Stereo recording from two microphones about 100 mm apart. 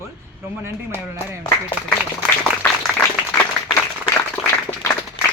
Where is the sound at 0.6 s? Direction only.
25° right (ahead or behind).